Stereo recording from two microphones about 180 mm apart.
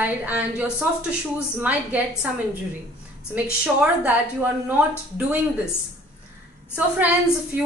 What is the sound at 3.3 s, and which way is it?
A woman's voice, 5° right (ahead or behind).